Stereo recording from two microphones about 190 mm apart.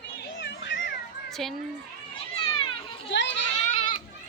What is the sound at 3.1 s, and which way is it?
Children playing, 70° left (ahead or behind).